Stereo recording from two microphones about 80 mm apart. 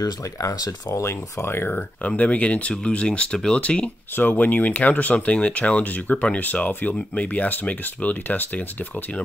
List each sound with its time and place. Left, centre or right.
0.0 s speech: left; by 8.6 s centre